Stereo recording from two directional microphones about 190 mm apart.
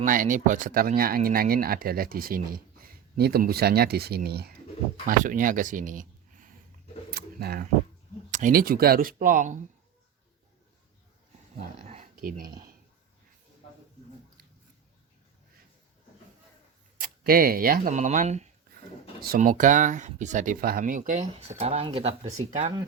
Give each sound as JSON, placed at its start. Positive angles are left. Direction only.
{"t": 0.0, "sound": "speech", "side_deg": -45}
{"t": 5.0, "sound": "speech", "side_deg": -45}
{"t": 7.1, "sound": "a sound", "side_deg": -55}
{"t": 8.3, "sound": "speech", "side_deg": -45}
{"t": 11.8, "sound": "a sound", "side_deg": -35}
{"t": 17.0, "sound": "speech", "side_deg": -50}
{"t": 19.2, "sound": "speech", "side_deg": -50}